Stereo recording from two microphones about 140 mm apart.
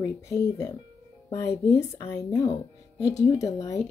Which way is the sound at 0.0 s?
25° left (ahead or behind).